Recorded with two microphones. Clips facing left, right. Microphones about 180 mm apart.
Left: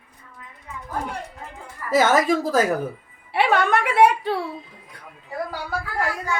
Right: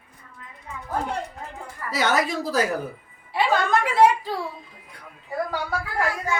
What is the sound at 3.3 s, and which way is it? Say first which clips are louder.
A woman's voice: left 2 dB; 70° left (ahead or behind).